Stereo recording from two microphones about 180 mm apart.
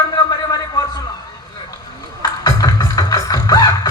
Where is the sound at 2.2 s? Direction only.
20° left (ahead or behind).